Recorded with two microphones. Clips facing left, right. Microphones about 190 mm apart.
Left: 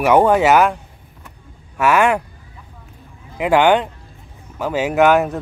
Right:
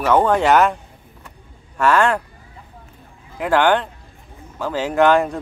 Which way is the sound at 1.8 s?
10° left (ahead or behind).